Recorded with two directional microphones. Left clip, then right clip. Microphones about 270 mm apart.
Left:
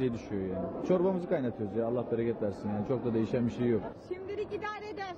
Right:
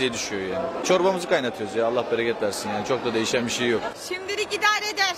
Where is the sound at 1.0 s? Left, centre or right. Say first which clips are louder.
Right 9 dB; centre.